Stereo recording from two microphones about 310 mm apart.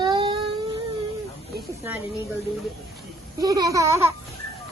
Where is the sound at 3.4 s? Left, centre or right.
Centre.